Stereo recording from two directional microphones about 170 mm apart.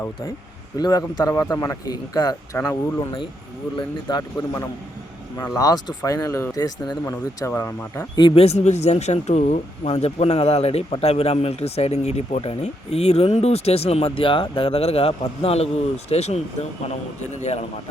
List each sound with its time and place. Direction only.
0.8 s speech: 25° left (ahead or behind)
5.4 s speech: 20° left (ahead or behind)
8.2 s speech: 35° left (ahead or behind)